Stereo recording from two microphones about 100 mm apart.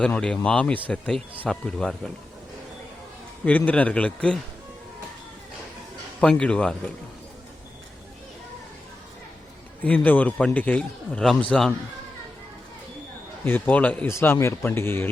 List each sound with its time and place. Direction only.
0.0 s a man's voice: 10° left (ahead or behind)
3.4 s a man's voice: 15° left (ahead or behind)
6.1 s a man's voice: 10° left (ahead or behind)
9.8 s a man's voice: 15° left (ahead or behind)
13.4 s a man's voice: 20° left (ahead or behind)
14.1 s speech: 25° left (ahead or behind)